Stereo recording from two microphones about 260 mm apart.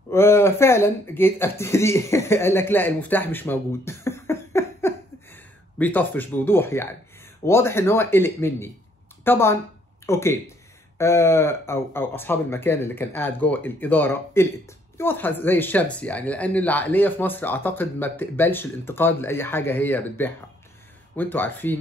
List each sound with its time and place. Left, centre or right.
0.1 s speech: centre